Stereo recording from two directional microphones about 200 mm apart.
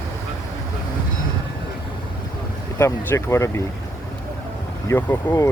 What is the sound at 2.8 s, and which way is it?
Speech, 15° left (ahead or behind).